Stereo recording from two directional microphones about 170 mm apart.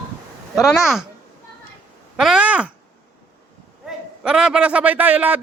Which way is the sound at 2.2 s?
5° right (ahead or behind).